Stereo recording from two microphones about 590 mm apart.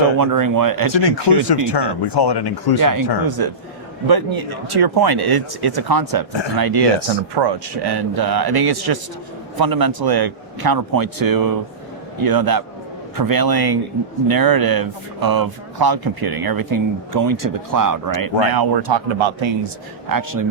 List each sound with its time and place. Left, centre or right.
0.2 s speech: right
1.0 s speech: left
2.8 s speech: right
20.1 s speech: right